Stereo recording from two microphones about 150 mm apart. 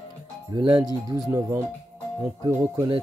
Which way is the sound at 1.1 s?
20° right (ahead or behind).